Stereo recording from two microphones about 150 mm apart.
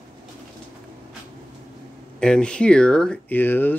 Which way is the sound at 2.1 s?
5° left (ahead or behind).